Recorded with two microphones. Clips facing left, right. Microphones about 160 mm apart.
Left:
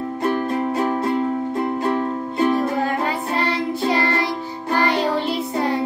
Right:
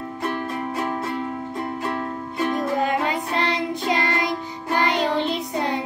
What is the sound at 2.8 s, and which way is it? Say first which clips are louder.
Music: left 1 dB; 20° right (ahead or behind).